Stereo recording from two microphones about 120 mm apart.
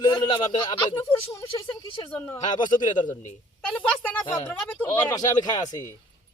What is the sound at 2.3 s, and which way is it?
Speech, 35° left (ahead or behind).